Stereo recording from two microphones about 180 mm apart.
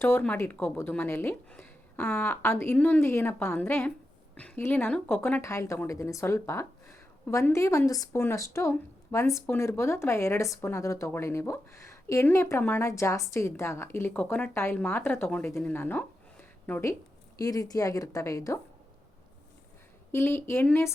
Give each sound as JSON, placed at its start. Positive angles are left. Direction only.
{"t": 0.0, "sound": "a woman's voice", "side_deg": 10}
{"t": 20.1, "sound": "speech", "side_deg": 15}